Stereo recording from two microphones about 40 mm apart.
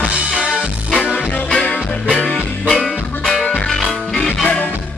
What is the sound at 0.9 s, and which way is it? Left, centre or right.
Music, left.